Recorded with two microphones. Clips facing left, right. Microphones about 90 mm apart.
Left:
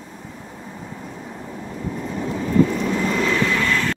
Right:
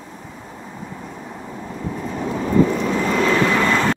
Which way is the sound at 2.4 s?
30° right (ahead or behind).